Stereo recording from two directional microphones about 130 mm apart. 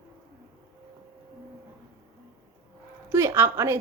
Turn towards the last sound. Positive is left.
turn(degrees=-20)  # may be behind; listen again after turning